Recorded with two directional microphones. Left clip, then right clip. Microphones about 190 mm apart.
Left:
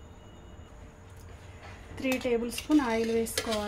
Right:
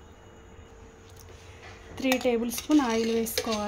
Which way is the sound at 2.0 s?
30° right (ahead or behind).